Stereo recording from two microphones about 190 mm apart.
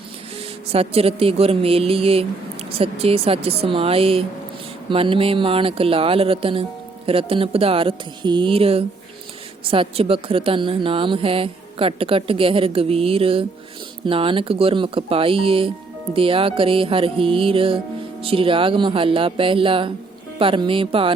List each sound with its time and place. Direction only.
0.7 s a woman's voice: 30° right (ahead or behind)